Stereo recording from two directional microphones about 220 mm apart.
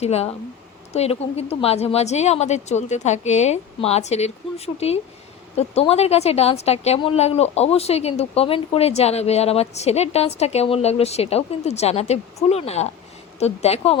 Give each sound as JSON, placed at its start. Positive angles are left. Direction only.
{"t": 0.0, "sound": "speech", "side_deg": 30}